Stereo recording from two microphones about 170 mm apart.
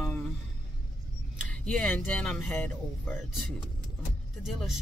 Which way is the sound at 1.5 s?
5° left (ahead or behind).